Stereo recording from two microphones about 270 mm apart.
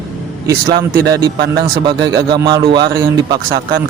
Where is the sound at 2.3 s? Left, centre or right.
Centre.